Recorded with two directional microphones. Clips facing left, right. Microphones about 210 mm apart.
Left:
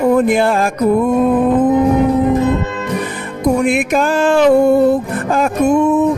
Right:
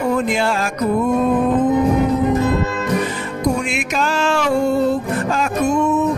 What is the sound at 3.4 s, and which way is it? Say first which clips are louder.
Music: left 7 dB; 55° left (ahead or behind).